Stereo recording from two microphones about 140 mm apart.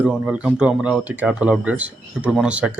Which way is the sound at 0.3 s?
10° right (ahead or behind).